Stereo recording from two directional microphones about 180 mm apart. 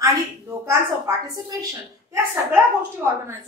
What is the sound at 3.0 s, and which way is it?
Speech, 15° right (ahead or behind).